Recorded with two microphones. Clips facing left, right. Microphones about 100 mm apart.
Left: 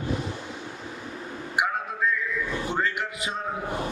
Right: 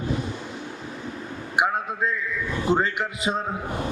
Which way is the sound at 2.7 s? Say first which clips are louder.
Right 8 dB; 20° right (ahead or behind).